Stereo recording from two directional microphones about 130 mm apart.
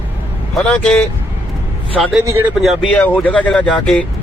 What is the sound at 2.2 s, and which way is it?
Speech, 20° right (ahead or behind).